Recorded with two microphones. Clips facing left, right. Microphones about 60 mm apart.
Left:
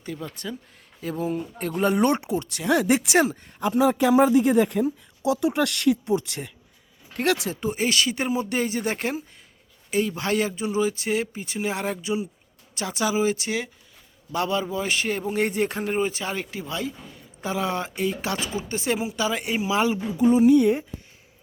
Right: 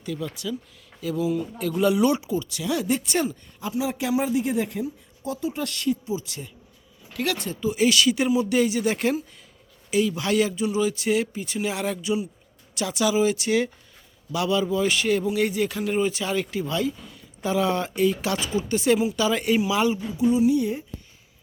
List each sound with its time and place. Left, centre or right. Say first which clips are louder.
0.0 s speech: right 3 dB; left
3.7 s speech: left 6 dB; left
7.3 s speech: left 1 dB; left
7.8 s speech: right 5 dB; left
15.4 s speech: even; left
15.8 s speech: right 1 dB; left
20.6 s speech: left 6 dB; left